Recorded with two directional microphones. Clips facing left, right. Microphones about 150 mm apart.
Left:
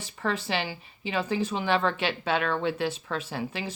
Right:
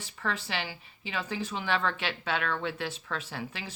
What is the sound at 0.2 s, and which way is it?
Speech, 20° left (ahead or behind).